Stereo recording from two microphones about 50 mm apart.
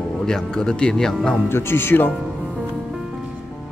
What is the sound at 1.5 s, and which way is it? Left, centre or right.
Speech, left.